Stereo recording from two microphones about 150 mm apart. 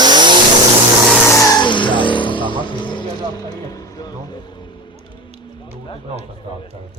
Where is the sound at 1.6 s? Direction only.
30° left (ahead or behind).